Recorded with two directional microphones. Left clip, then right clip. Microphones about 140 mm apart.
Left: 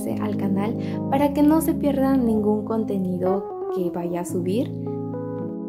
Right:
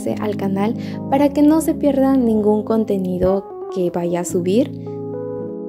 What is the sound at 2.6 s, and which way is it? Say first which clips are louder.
Speech: right 6 dB; 45° right (ahead or behind).